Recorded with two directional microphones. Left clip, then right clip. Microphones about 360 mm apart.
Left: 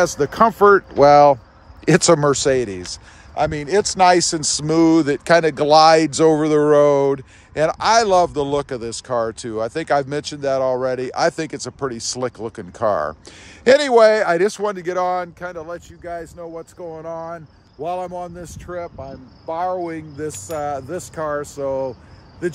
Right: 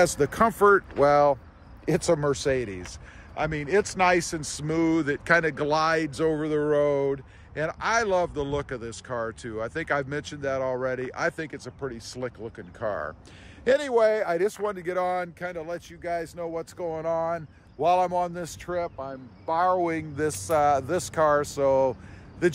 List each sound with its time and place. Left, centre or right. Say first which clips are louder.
0.0 s speech: left 6 dB; centre